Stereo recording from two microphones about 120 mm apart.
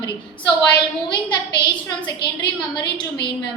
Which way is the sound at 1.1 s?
40° left (ahead or behind).